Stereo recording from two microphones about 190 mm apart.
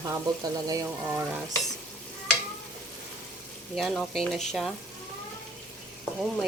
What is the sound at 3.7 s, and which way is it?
Speech, centre (ahead or behind).